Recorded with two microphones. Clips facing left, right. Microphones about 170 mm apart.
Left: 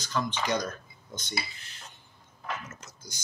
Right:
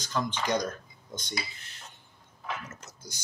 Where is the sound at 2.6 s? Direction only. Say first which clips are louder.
Right 1 dB; 60° right (ahead or behind).